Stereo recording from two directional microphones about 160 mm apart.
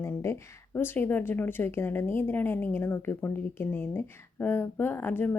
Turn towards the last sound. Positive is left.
turn(degrees=10)  # may be behind; listen again after turning